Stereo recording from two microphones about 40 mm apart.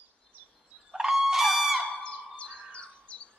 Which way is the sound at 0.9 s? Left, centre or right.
Centre.